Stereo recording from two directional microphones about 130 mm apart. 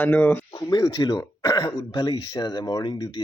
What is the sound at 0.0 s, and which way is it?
Speech, 10° left (ahead or behind).